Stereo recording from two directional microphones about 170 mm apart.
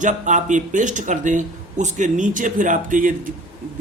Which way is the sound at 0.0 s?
45° right (ahead or behind).